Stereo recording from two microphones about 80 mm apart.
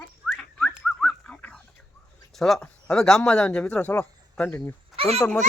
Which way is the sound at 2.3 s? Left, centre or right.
Centre.